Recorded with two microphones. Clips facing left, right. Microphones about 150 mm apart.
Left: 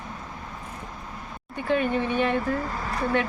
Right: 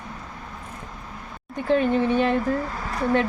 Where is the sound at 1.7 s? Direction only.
30° right (ahead or behind).